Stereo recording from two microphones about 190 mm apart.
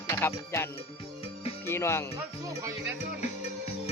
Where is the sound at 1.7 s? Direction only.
15° left (ahead or behind).